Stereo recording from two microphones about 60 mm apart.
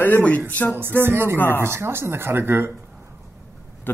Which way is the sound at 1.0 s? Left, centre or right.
Right.